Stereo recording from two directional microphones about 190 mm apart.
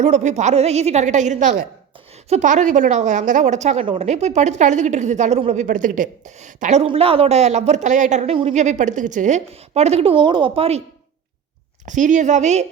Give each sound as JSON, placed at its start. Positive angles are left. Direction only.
{"t": 0.0, "sound": "a woman's voice", "side_deg": -40}
{"t": 11.9, "sound": "a woman's voice", "side_deg": -40}